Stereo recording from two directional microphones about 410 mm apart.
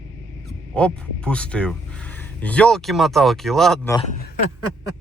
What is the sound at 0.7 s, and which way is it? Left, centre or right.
Speech, centre.